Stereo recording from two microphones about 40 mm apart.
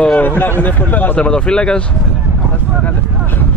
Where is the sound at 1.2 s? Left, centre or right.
Left.